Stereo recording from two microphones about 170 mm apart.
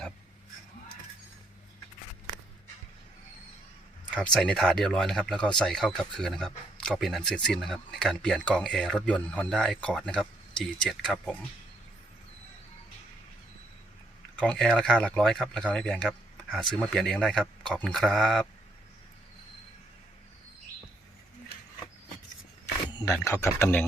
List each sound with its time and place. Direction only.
4.1 s speech: 5° left (ahead or behind)
14.3 s speech: 5° left (ahead or behind)
22.9 s camera: 25° left (ahead or behind)
23.1 s speech: 15° left (ahead or behind)